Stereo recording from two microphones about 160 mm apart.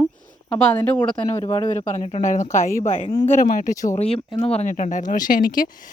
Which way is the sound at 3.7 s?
20° left (ahead or behind).